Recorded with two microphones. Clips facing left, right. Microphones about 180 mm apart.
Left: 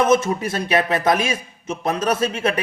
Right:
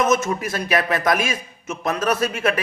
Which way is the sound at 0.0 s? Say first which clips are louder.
Left 3 dB; 30° left (ahead or behind).